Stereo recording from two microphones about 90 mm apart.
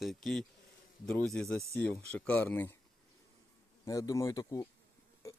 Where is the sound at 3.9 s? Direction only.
40° left (ahead or behind).